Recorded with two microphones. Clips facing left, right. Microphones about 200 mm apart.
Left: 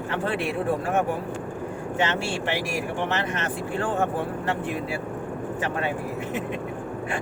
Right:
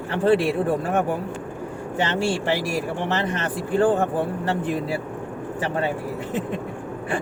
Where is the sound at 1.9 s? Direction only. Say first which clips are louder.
Right 4 dB; 35° right (ahead or behind).